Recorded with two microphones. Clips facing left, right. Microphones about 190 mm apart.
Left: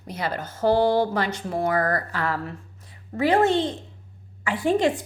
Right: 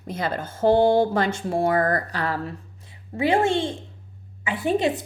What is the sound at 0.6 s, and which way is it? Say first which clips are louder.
Speech: right 2 dB; 25° right (ahead or behind).